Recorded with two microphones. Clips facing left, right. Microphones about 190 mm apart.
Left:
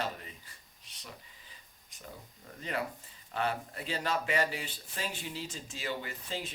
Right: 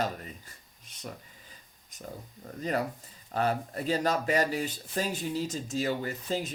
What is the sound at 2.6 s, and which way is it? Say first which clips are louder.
Speech: right 6 dB; 40° right (ahead or behind).